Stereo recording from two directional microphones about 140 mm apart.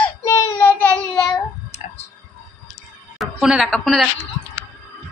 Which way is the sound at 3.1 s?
Centre (ahead or behind).